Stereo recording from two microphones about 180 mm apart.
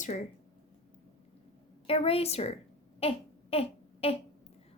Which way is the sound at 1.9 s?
35° left (ahead or behind).